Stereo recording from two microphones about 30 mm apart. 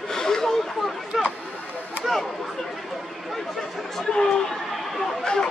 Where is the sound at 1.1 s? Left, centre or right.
Centre.